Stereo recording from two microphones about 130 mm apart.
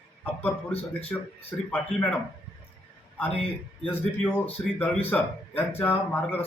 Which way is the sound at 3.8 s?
10° left (ahead or behind).